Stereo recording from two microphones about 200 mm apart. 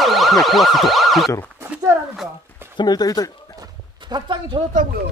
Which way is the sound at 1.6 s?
10° right (ahead or behind).